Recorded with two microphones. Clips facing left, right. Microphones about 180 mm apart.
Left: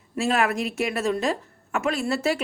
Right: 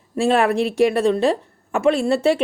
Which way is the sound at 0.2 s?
30° right (ahead or behind).